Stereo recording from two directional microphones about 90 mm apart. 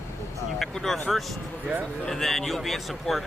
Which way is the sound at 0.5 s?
Centre (ahead or behind).